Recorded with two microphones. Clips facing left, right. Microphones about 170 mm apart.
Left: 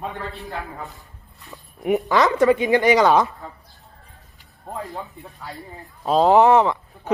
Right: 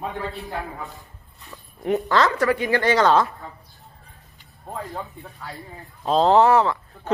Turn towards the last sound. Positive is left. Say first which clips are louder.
# left 2 dB
turn(degrees=20)  # may be behind; listen again after turning